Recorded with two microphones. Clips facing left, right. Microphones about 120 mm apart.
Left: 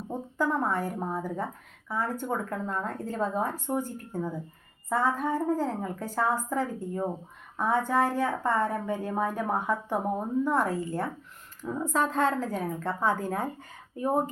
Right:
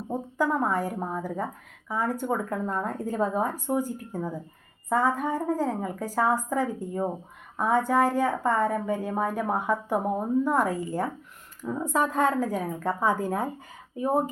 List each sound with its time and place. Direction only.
0.1 s a woman's voice: 10° right (ahead or behind)